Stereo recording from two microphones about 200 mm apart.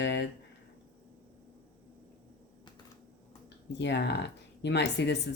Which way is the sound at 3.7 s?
60° left (ahead or behind).